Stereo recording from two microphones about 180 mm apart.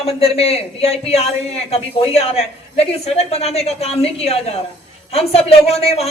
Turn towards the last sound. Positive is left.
turn(degrees=35)  # may be behind; listen again after turning